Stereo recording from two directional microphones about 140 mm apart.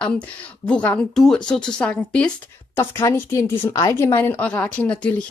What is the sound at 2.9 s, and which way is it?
A woman's voice, 20° left (ahead or behind).